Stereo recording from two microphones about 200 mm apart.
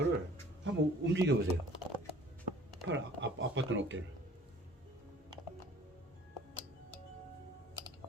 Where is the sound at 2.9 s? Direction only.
70° right (ahead or behind).